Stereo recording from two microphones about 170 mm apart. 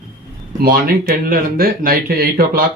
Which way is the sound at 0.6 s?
60° right (ahead or behind).